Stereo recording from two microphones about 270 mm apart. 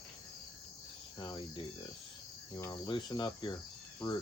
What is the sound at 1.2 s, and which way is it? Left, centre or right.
Speech, centre.